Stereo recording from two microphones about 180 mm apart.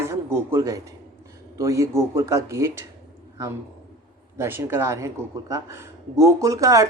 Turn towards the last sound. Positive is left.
turn(degrees=-20)  # may be behind; listen again after turning